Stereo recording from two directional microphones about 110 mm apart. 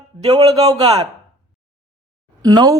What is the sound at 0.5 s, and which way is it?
Speech, 35° right (ahead or behind).